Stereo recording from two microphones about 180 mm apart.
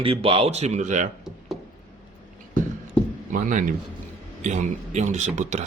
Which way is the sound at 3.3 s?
45° right (ahead or behind).